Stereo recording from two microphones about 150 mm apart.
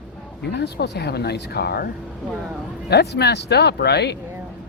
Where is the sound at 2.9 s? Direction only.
90° left.